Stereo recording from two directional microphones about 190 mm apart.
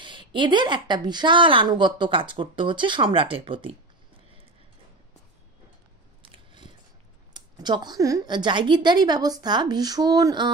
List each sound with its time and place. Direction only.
0.0 s a woman's voice: 25° right (ahead or behind)
6.2 s biting: 25° right (ahead or behind)
7.3 s a woman's voice: 20° right (ahead or behind)